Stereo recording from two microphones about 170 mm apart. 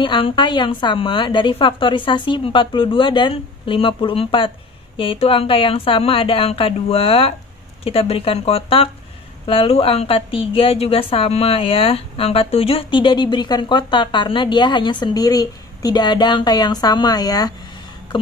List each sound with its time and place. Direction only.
0.0 s a woman's voice: 30° left (ahead or behind)